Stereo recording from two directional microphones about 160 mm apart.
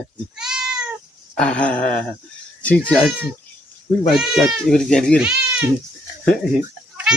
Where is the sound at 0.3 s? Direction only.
5° right (ahead or behind).